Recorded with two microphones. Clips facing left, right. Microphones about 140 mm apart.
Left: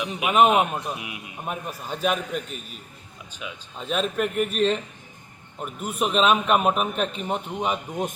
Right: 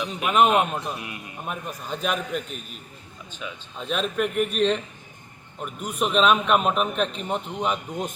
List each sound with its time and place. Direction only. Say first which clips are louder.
0.0 s a man's voice: left 1 dB; 5° left (ahead or behind)